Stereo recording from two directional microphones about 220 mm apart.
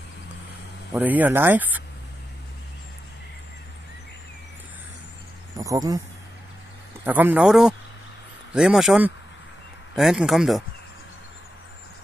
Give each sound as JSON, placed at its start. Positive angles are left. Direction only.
{"t": 0.9, "sound": "speech", "side_deg": -5}
{"t": 5.6, "sound": "speech", "side_deg": -15}
{"t": 7.1, "sound": "speech", "side_deg": -10}